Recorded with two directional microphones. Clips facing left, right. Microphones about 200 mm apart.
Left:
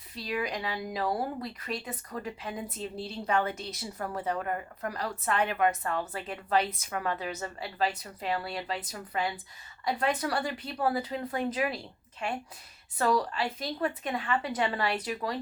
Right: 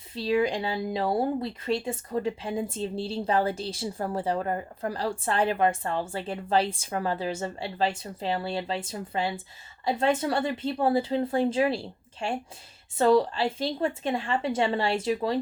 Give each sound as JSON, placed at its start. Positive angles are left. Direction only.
{"t": 0.1, "sound": "speech", "side_deg": -25}